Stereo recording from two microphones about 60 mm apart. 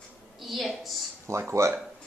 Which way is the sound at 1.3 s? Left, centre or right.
Right.